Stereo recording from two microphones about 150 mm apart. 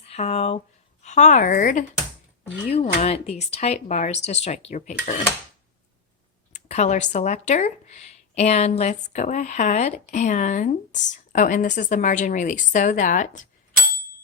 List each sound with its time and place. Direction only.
0.0 s speech: 45° left (ahead or behind)
1.0 s speech: 55° left (ahead or behind)
2.6 s speech: 45° left (ahead or behind)
6.5 s speech: 50° left (ahead or behind)